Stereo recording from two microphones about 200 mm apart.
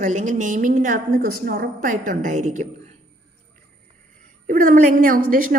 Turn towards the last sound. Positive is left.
turn(degrees=-45)  # may be behind; listen again after turning